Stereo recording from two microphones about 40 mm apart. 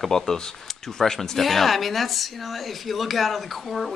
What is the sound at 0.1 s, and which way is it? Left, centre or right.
Speech, centre.